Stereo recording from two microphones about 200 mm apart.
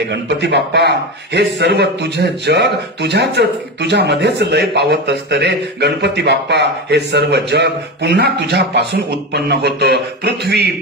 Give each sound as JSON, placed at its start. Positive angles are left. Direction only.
{"t": 0.1, "sound": "a man's voice", "side_deg": -60}